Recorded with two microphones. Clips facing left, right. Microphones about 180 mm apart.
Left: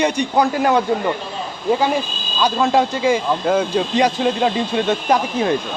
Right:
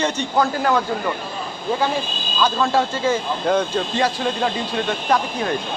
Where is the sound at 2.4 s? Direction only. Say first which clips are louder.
Left 3 dB; 15° left (ahead or behind).